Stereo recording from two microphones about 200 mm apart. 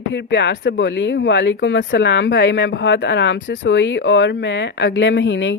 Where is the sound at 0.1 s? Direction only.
65° left (ahead or behind).